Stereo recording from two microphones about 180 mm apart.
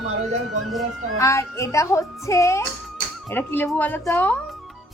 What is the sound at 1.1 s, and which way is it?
Speech, 15° left (ahead or behind).